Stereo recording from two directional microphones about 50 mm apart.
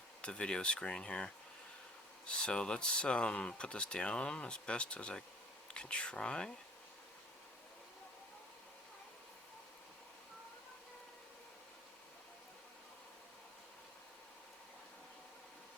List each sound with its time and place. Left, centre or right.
0.2 s speech: left